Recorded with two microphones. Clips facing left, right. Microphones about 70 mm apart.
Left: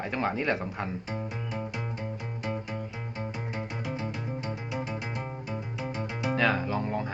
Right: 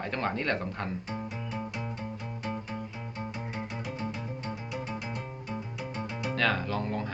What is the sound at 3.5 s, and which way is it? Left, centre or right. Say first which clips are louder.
Music: left 3 dB; left.